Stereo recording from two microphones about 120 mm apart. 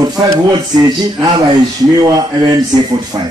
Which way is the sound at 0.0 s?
35° right (ahead or behind).